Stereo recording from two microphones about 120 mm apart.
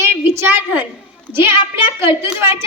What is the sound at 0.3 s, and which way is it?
A woman's voice, 20° right (ahead or behind).